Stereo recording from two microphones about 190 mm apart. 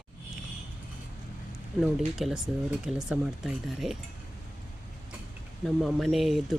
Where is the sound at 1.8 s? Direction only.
Centre (ahead or behind).